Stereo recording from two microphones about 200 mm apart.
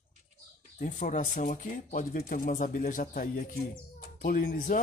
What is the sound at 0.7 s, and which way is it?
Speech, 40° left (ahead or behind).